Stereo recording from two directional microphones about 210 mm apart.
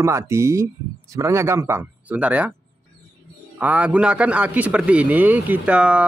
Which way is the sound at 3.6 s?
5° right (ahead or behind).